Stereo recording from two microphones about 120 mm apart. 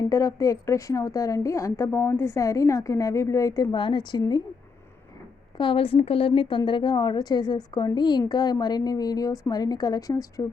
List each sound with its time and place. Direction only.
0.0 s a woman's voice: 25° left (ahead or behind)
3.8 s a woman's voice: 40° left (ahead or behind)
5.5 s a woman's voice: 45° left (ahead or behind); by 10.4 s 30° left (ahead or behind)